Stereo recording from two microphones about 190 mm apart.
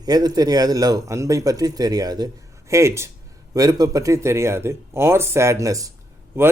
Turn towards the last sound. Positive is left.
turn(degrees=-15)  # may be behind; listen again after turning